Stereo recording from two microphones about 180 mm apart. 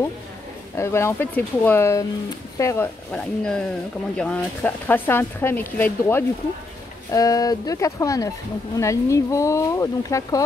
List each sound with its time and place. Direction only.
0.7 s speech: 15° left (ahead or behind)